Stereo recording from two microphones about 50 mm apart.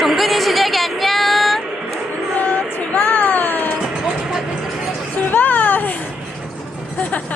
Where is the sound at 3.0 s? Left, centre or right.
Left.